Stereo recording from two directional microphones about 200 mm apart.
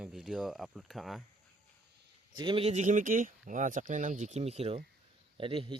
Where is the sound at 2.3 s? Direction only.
25° right (ahead or behind).